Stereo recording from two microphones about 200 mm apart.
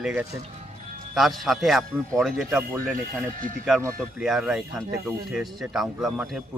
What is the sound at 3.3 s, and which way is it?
Speech, 40° right (ahead or behind).